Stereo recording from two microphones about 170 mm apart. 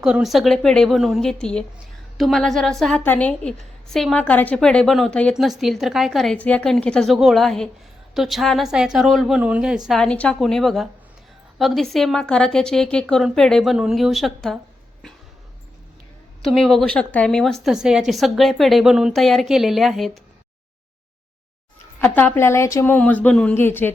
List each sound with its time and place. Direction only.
0.0 s a woman's voice: centre (ahead or behind)
16.4 s a woman's voice: centre (ahead or behind)
21.9 s a woman's voice: 10° left (ahead or behind)